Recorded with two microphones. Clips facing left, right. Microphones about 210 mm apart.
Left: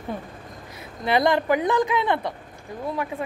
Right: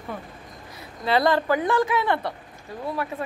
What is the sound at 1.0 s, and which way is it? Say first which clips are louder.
Speech: even; 15° left (ahead or behind).